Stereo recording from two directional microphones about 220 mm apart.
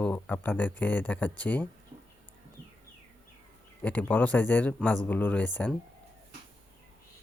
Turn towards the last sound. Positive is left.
turn(degrees=5)  # may be behind; listen again after turning